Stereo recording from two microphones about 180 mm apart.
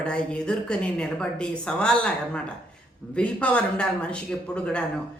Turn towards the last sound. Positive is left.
turn(degrees=5)  # may be behind; listen again after turning